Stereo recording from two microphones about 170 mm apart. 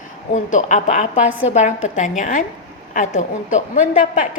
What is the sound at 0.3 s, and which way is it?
A woman's voice, 45° left (ahead or behind).